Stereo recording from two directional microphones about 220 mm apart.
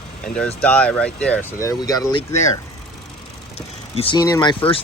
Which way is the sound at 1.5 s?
15° left (ahead or behind).